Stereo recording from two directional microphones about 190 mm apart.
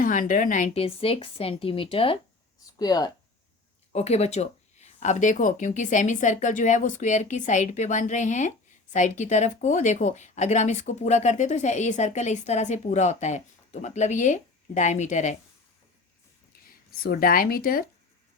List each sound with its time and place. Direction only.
0.0 s speech: 45° left (ahead or behind); by 3.1 s 20° left (ahead or behind)
3.9 s speech: 35° left (ahead or behind)
16.6 s speech: 50° left (ahead or behind)